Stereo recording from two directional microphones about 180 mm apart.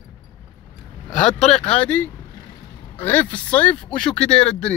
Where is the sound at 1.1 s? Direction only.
40° left (ahead or behind).